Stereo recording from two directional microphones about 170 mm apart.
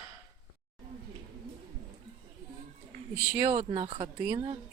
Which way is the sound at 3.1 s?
10° right (ahead or behind).